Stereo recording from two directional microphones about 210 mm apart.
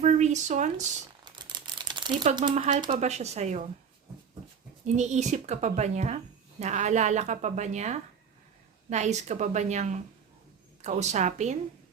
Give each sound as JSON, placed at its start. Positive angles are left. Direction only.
{"t": 0.0, "sound": "speech", "side_deg": -35}
{"t": 1.2, "sound": "crumpling", "side_deg": -20}
{"t": 2.3, "sound": "speech", "side_deg": -25}
{"t": 4.9, "sound": "speech", "side_deg": -35}